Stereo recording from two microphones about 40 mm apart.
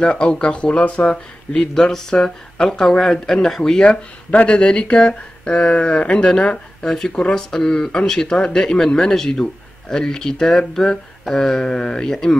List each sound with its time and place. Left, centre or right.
0.0 s speech: left
4.3 s speech: left; by 12.4 s centre